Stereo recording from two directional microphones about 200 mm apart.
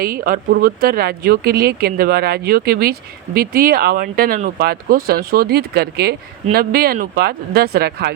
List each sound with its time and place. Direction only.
0.0 s speech: 45° right (ahead or behind)